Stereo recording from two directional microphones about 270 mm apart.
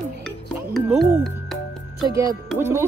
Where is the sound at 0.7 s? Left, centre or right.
Centre.